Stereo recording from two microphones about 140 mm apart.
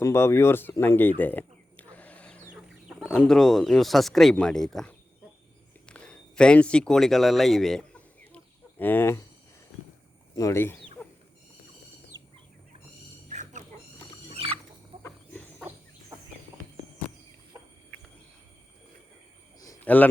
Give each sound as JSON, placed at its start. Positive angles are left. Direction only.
{"t": 0.0, "sound": "speech", "side_deg": 20}
{"t": 0.8, "sound": "a sound", "side_deg": 15}
{"t": 2.5, "sound": "chicken", "side_deg": -5}
{"t": 3.2, "sound": "speech", "side_deg": 5}
{"t": 5.8, "sound": "a sound", "side_deg": 5}
{"t": 8.8, "sound": "speech", "side_deg": 15}
{"t": 9.7, "sound": "walk", "side_deg": 0}
{"t": 10.3, "sound": "speech", "side_deg": 20}
{"t": 11.0, "sound": "wild animals", "side_deg": 15}
{"t": 13.2, "sound": "dog", "side_deg": -60}
{"t": 14.3, "sound": "chicken", "side_deg": -40}
{"t": 15.0, "sound": "wild animals", "side_deg": 10}
{"t": 19.5, "sound": "a sound", "side_deg": 25}
{"t": 19.8, "sound": "a man's voice", "side_deg": 10}